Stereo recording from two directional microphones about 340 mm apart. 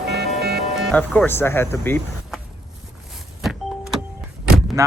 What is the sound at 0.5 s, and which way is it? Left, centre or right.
Speech, centre.